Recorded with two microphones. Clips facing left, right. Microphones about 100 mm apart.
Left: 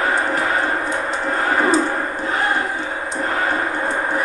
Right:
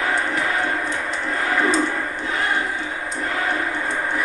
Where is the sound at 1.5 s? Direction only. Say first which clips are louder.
Left 3 dB; 40° left (ahead or behind).